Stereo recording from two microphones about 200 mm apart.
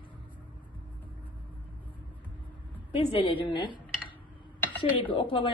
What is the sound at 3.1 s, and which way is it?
Speech, 25° left (ahead or behind).